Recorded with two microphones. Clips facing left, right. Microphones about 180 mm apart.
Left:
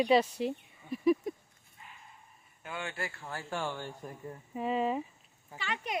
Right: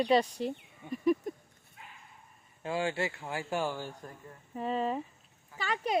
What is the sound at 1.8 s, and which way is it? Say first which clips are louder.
Bow-wow: right 2 dB; 90° right.